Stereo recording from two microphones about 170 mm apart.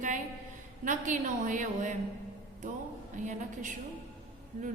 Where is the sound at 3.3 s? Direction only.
45° right (ahead or behind).